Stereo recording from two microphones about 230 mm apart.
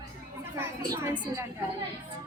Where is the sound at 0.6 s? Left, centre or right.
Centre.